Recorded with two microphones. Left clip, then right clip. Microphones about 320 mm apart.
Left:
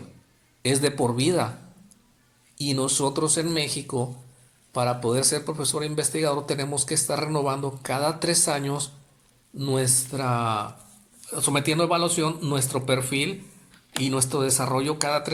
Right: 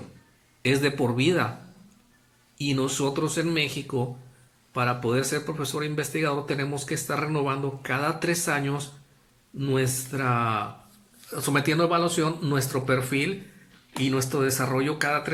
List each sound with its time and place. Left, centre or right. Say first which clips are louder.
0.6 s speech: left 1 dB; centre
2.6 s speech: left 1 dB; centre